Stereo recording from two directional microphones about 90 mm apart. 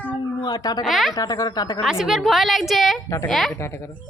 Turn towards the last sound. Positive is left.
turn(degrees=30)  # may be behind; listen again after turning